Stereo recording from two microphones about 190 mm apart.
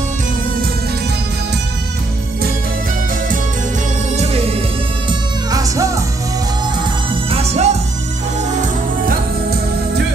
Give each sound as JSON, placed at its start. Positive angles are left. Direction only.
{"t": 5.5, "sound": "music", "side_deg": -20}
{"t": 7.2, "sound": "music", "side_deg": -35}
{"t": 9.0, "sound": "music", "side_deg": -55}